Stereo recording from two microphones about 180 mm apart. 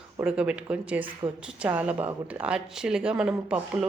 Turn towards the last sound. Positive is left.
turn(degrees=-5)  # may be behind; listen again after turning